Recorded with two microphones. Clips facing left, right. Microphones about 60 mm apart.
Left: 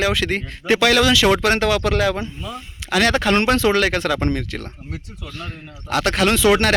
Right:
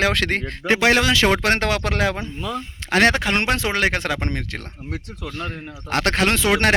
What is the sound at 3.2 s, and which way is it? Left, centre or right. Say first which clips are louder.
A man's voice: left 4 dB; right.